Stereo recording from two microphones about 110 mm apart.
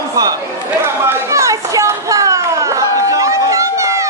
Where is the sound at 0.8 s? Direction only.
25° right (ahead or behind).